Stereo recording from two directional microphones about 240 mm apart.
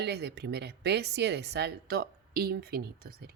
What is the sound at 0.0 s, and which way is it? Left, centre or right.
A woman's voice, right.